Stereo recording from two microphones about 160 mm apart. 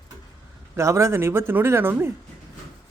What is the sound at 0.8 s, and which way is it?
Speech, 15° right (ahead or behind).